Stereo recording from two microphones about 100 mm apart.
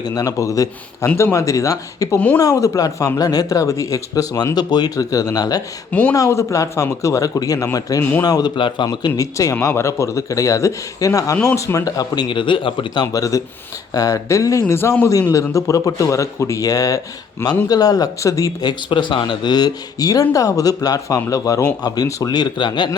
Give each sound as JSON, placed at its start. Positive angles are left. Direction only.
{"t": 0.0, "sound": "speech", "side_deg": 35}
{"t": 2.1, "sound": "speech", "side_deg": 15}
{"t": 2.4, "sound": "speech", "side_deg": 35}
{"t": 5.9, "sound": "speech", "side_deg": 15}
{"t": 6.1, "sound": "speech", "side_deg": 30}
{"t": 8.5, "sound": "speech", "side_deg": 55}
{"t": 8.9, "sound": "speech", "side_deg": 35}
{"t": 12.3, "sound": "speech", "side_deg": 55}
{"t": 13.9, "sound": "a man's voice", "side_deg": 35}